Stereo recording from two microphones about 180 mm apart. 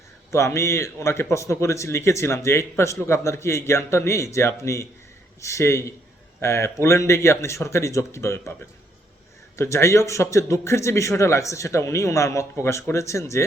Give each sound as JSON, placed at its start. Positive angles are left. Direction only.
{"t": 0.3, "sound": "a man's voice", "side_deg": 15}
{"t": 9.6, "sound": "a man's voice", "side_deg": 15}